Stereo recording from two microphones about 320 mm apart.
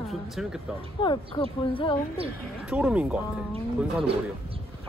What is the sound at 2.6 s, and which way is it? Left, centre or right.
Speech, centre.